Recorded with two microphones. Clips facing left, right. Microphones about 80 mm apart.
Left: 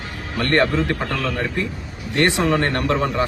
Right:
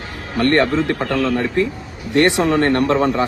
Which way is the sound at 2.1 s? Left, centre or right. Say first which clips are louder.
Right 4 dB; right.